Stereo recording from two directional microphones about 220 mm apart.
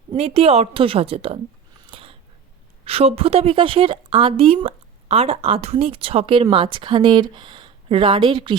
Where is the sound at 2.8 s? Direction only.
25° right (ahead or behind).